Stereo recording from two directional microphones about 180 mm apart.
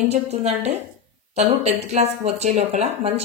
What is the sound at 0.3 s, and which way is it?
A woman's voice, 35° right (ahead or behind).